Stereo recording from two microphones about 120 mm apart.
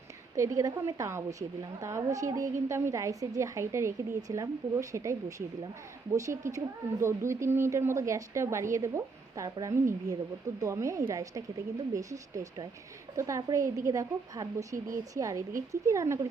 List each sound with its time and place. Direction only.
0.3 s speech: 25° right (ahead or behind)
6.1 s speech: 25° right (ahead or behind)